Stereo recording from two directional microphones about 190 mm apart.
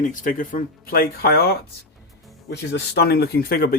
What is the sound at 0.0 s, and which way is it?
Speech, 45° left (ahead or behind).